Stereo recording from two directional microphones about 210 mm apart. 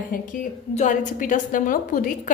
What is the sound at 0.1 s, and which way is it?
A woman's voice, 40° left (ahead or behind).